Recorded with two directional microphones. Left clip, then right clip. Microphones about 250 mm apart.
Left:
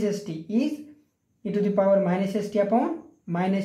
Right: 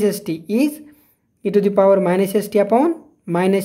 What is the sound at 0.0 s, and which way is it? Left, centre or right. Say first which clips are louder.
Speech: right 9 dB; right.